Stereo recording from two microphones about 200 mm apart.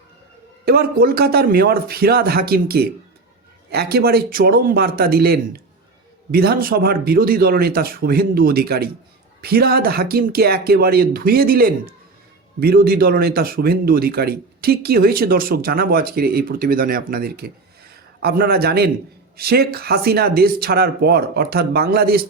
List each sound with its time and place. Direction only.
0.6 s speech: 50° right (ahead or behind)